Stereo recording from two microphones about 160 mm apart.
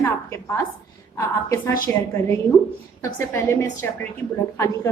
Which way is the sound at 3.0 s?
15° left (ahead or behind).